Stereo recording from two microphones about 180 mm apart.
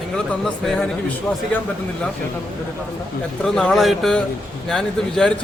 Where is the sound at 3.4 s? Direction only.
5° left (ahead or behind).